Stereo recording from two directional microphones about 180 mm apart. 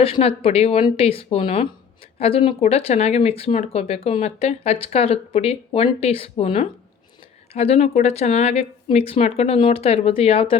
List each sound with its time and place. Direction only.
0.0 s speech: 30° left (ahead or behind)